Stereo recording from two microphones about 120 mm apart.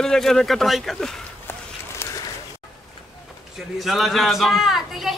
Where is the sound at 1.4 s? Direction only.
20° left (ahead or behind).